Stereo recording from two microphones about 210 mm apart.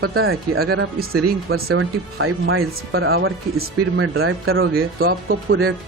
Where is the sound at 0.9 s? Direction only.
45° right (ahead or behind).